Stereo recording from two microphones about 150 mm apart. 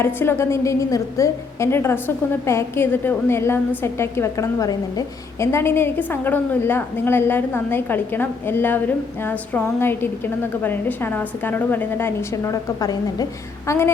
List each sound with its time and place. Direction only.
0.0 s a woman's voice: 15° left (ahead or behind)